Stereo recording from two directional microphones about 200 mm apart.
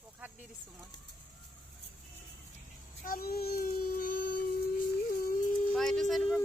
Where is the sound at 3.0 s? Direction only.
45° left (ahead or behind).